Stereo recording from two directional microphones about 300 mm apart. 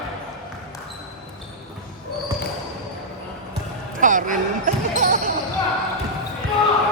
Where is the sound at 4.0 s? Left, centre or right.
Right.